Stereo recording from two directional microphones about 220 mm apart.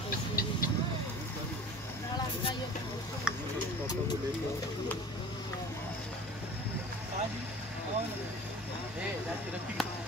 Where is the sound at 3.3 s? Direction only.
5° right (ahead or behind).